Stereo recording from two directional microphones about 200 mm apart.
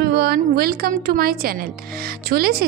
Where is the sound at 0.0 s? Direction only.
50° right (ahead or behind).